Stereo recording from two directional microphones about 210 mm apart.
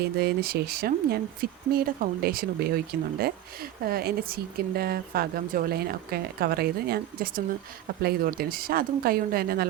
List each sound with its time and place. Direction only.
0.2 s speech: 50° right (ahead or behind)